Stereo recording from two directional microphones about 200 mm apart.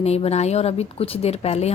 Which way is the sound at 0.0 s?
30° left (ahead or behind).